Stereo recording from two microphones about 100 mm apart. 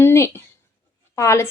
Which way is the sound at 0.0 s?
25° left (ahead or behind).